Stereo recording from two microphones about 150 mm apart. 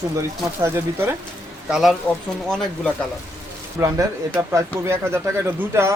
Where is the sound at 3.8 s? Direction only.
20° right (ahead or behind).